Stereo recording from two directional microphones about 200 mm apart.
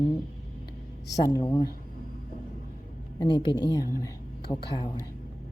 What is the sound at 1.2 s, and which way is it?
Speech, 20° left (ahead or behind).